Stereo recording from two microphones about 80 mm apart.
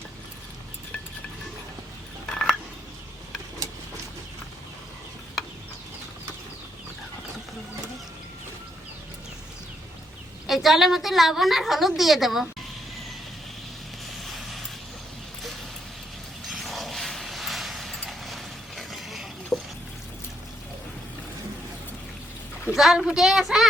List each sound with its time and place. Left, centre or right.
2.3 s telephone dialing: centre
10.4 s a woman's voice: centre
14.3 s vehicle: centre
16.5 s a sound: centre
22.7 s a woman's voice: centre